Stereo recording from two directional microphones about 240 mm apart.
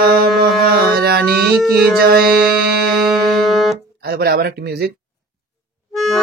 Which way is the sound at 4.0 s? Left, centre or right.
Right.